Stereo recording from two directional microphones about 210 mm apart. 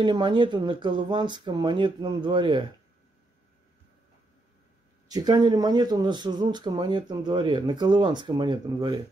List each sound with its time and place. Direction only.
0.0 s speech: 20° right (ahead or behind)
5.0 s speech: 20° right (ahead or behind)